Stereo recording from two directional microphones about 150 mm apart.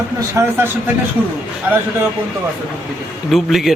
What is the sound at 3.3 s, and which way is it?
Speech, centre (ahead or behind).